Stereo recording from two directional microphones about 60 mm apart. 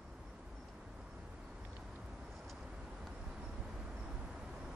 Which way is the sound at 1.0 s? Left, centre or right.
Centre.